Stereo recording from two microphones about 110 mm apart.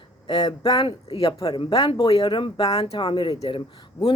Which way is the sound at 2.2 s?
45° left (ahead or behind).